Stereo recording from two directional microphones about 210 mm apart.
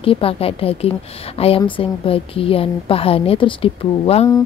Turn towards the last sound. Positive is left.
turn(degrees=25)  # may be behind; listen again after turning